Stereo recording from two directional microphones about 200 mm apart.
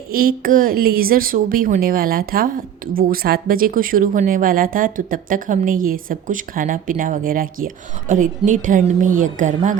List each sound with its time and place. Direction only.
0.1 s speech: 45° right (ahead or behind)